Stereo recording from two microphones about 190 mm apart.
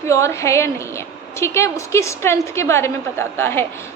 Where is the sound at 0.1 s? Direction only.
15° left (ahead or behind).